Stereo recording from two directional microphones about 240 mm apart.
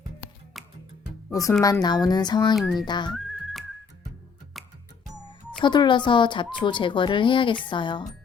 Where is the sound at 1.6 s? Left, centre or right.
Centre.